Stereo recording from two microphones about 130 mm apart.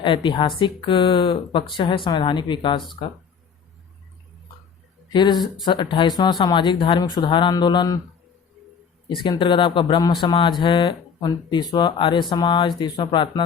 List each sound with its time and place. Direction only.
0.0 s speech: 35° left (ahead or behind)
5.1 s speech: 35° left (ahead or behind)
9.2 s speech: 35° left (ahead or behind)